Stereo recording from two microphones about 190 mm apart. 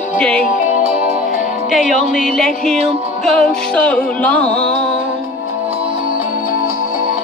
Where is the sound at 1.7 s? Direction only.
Centre (ahead or behind).